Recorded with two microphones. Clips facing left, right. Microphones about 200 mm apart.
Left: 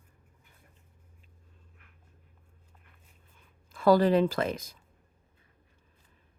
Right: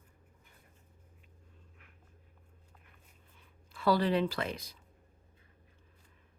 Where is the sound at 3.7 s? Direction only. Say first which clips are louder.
Left 7 dB; 45° left (ahead or behind).